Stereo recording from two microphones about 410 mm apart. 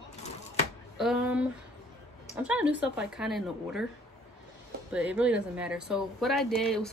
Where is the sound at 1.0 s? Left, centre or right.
Centre.